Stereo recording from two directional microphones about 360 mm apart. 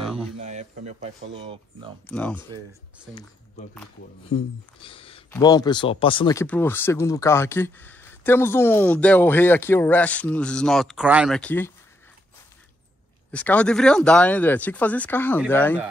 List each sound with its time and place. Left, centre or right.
0.0 s a sound: centre
0.4 s speech: centre
2.0 s speech: centre
4.3 s speech: centre
13.3 s speech: centre